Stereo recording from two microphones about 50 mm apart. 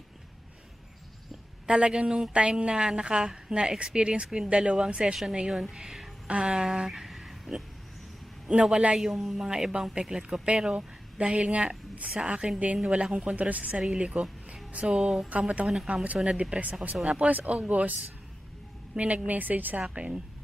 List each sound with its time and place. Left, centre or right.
1.7 s a woman's voice: centre
11.1 s speech: right
13.7 s speech: centre
15.0 s a woman's voice: centre
15.9 s speech: right
16.9 s a woman's voice: centre
17.2 s speech: right
18.9 s a woman's voice: right
19.9 s speech: right